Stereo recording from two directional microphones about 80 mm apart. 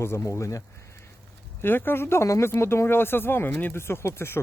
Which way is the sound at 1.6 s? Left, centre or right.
Left.